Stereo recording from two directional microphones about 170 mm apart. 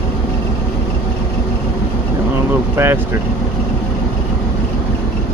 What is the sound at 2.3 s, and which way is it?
Vehicle, 15° right (ahead or behind).